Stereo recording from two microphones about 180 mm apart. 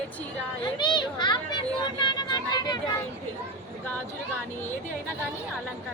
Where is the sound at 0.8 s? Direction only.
25° left (ahead or behind).